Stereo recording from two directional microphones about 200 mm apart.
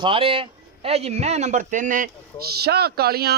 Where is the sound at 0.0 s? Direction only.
25° right (ahead or behind).